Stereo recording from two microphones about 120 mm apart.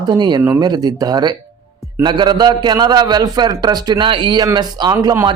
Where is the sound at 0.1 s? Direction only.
35° right (ahead or behind).